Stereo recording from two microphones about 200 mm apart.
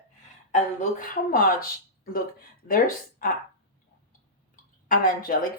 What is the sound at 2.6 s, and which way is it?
Speech, 45° left (ahead or behind).